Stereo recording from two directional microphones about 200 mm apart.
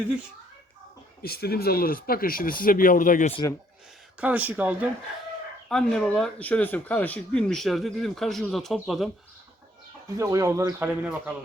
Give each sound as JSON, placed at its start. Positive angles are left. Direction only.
{"t": 1.2, "sound": "speech", "side_deg": 50}
{"t": 4.2, "sound": "speech", "side_deg": -5}
{"t": 5.6, "sound": "speech", "side_deg": 5}
{"t": 10.2, "sound": "speech", "side_deg": -15}